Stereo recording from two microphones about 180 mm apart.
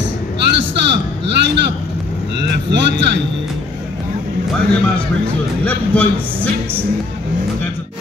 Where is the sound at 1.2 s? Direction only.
75° right (ahead or behind).